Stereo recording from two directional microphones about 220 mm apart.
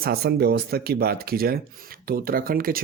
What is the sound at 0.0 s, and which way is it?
Speech, 45° right (ahead or behind).